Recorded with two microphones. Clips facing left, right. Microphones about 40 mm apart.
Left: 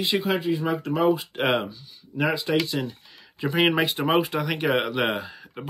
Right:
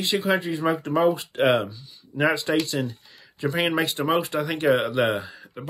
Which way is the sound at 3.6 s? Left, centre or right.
Centre.